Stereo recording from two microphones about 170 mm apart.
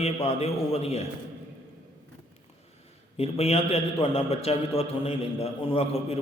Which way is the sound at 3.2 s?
35° left (ahead or behind).